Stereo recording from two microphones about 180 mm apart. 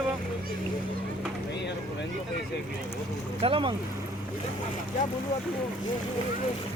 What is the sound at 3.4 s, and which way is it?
Speech, 30° right (ahead or behind).